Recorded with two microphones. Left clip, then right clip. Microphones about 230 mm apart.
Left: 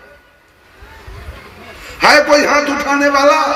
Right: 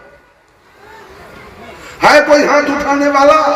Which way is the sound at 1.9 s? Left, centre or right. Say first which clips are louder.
Right 1 dB; left.